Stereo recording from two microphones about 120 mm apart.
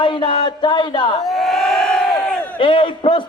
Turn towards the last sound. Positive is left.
turn(degrees=45)  # may be behind; listen again after turning